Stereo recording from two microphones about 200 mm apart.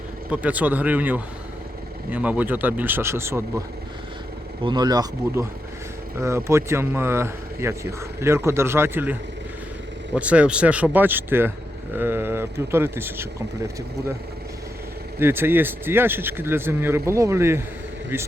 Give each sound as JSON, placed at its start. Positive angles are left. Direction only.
{"t": 0.3, "sound": "speech", "side_deg": -5}
{"t": 4.6, "sound": "speech", "side_deg": -20}
{"t": 10.2, "sound": "speech", "side_deg": -5}
{"t": 15.2, "sound": "speech", "side_deg": -10}